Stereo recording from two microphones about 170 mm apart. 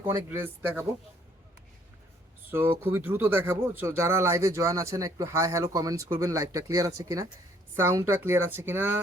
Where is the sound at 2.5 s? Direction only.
10° right (ahead or behind).